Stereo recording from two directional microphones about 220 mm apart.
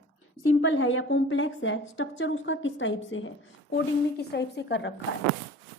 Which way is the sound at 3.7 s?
50° left (ahead or behind).